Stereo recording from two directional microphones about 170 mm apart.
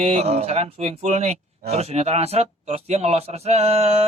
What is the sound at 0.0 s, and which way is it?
Speech, 40° right (ahead or behind).